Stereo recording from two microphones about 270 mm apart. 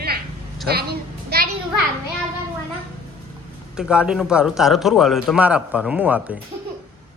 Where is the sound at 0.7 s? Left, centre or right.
Right.